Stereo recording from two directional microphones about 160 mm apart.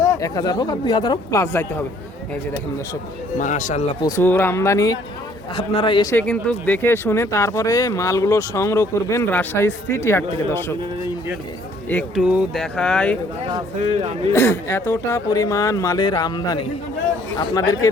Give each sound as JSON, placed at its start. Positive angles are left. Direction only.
{"t": 0.2, "sound": "speech", "side_deg": 25}
{"t": 3.3, "sound": "speech", "side_deg": 50}
{"t": 4.2, "sound": "speech", "side_deg": 15}
{"t": 5.5, "sound": "a man's voice", "side_deg": 30}
{"t": 6.1, "sound": "speech", "side_deg": 10}
{"t": 11.9, "sound": "speech", "side_deg": 10}
{"t": 12.2, "sound": "speech", "side_deg": -5}
{"t": 12.7, "sound": "speech", "side_deg": 5}
{"t": 14.3, "sound": "speech", "side_deg": 15}